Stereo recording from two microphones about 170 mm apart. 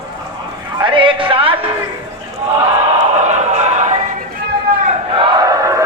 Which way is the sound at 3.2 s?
45° right (ahead or behind).